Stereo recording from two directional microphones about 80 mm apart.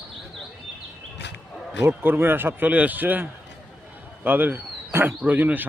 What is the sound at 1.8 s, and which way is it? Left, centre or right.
A man's voice, right.